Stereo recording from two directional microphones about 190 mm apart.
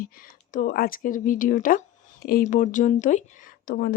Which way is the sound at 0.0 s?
45° left (ahead or behind).